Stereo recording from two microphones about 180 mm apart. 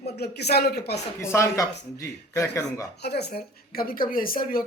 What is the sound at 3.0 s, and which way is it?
Speech, 65° left (ahead or behind).